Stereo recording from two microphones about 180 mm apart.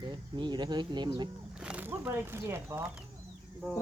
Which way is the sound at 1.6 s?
5° right (ahead or behind).